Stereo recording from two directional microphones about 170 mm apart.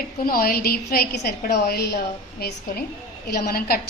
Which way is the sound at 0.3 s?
60° left (ahead or behind).